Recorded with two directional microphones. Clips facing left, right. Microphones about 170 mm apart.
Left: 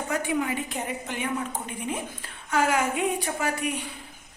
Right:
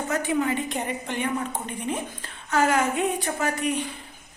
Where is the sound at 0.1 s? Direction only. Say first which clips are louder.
Right 2 dB; 10° left (ahead or behind).